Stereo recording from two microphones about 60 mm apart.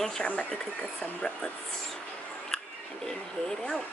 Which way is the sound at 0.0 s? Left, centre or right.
Centre.